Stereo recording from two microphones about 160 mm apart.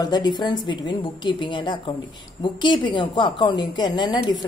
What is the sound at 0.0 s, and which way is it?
A woman's voice, 25° left (ahead or behind).